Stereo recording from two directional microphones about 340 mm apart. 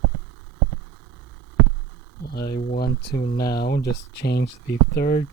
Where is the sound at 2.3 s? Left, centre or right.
Left.